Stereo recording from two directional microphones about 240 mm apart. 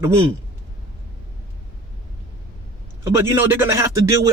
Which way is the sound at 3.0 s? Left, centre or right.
Centre.